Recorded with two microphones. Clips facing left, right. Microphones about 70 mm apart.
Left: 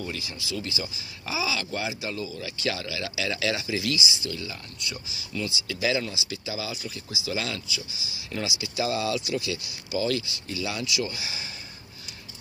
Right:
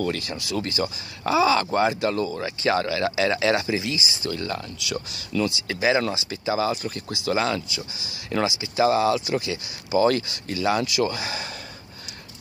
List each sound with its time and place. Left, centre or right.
0.0 s speech: right
3.7 s speech: right
4.7 s speech: right
5.7 s speech: right